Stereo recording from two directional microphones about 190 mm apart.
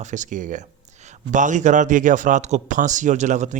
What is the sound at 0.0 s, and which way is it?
Speech, 40° right (ahead or behind).